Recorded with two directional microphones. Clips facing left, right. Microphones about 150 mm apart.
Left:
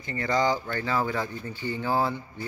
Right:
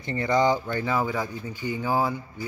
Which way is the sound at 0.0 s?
20° right (ahead or behind).